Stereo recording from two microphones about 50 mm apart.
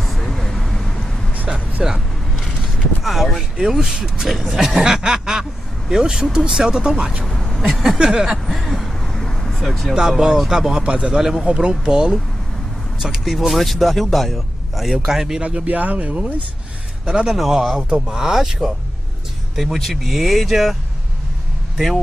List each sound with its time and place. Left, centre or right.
0.0 s vehicle: centre
1.8 s speech: centre
3.0 s speech: centre
7.2 s a sound: centre
7.6 s speech: centre
8.0 s speech: centre
9.9 s speech: centre
15.4 s speech: right
17.0 s a man's voice: centre
17.3 s speech: centre
19.5 s speech: centre
21.7 s speech: centre